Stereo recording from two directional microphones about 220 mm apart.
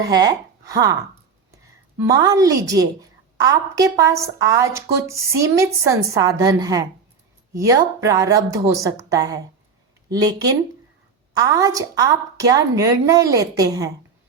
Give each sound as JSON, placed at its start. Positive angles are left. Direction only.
{"t": 0.0, "sound": "speech", "side_deg": -15}
{"t": 2.0, "sound": "a woman's voice", "side_deg": -15}